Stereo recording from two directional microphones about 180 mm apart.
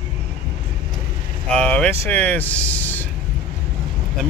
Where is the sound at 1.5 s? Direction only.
5° left (ahead or behind).